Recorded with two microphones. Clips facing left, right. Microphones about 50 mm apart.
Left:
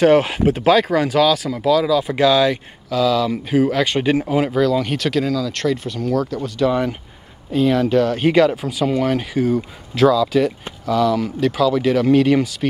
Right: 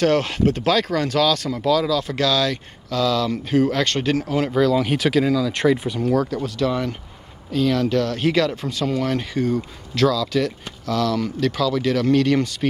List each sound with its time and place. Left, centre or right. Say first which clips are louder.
0.0 s speech: left 5 dB; centre
4.6 s speech: left 1 dB; centre